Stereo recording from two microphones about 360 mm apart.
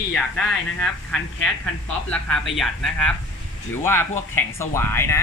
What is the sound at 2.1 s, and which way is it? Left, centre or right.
Speech, centre.